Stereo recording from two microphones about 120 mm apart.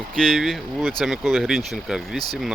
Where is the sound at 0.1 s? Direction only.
5° left (ahead or behind).